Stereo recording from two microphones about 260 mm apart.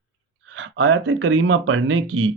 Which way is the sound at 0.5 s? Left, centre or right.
Right.